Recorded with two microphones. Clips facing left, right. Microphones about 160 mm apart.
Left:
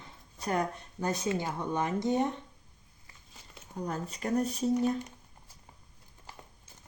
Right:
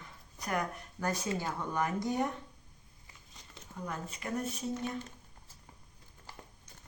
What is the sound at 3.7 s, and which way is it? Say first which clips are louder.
Speech: left 5 dB; 35° left (ahead or behind).